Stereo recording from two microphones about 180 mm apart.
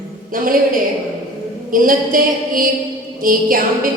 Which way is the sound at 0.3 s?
50° right (ahead or behind).